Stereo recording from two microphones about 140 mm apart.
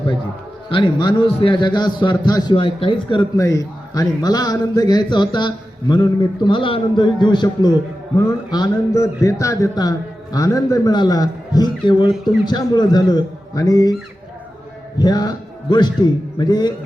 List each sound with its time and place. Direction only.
0.7 s a man's voice: 35° left (ahead or behind)
3.3 s a man's voice: 25° left (ahead or behind)
14.9 s a man's voice: 30° left (ahead or behind)